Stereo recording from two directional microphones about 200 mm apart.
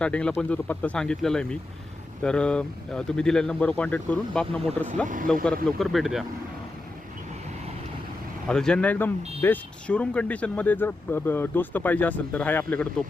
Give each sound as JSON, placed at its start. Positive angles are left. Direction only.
{"t": 0.0, "sound": "speech", "side_deg": 5}
{"t": 5.0, "sound": "speech", "side_deg": -40}
{"t": 5.6, "sound": "speech", "side_deg": 0}
{"t": 8.4, "sound": "speech", "side_deg": 5}